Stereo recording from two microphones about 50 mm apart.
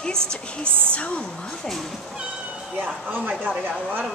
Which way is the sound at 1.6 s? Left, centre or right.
Centre.